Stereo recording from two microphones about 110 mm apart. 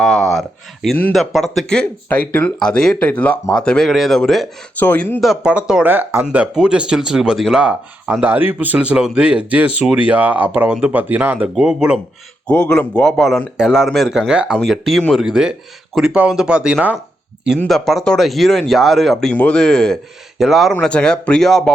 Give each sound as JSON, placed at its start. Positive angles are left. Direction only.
{"t": 0.0, "sound": "speech", "side_deg": 0}
{"t": 4.8, "sound": "speech", "side_deg": 15}
{"t": 5.2, "sound": "speech", "side_deg": -5}
{"t": 12.5, "sound": "speech", "side_deg": 10}
{"t": 17.7, "sound": "speech", "side_deg": 0}